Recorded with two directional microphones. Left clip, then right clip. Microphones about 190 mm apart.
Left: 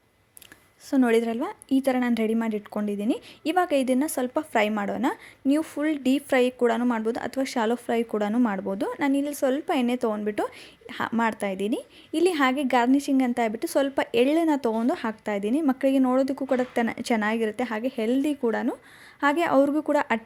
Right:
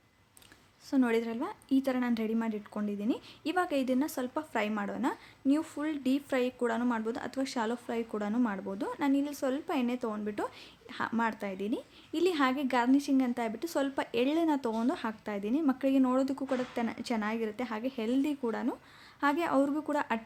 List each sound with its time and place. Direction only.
0.9 s a woman's voice: 25° left (ahead or behind)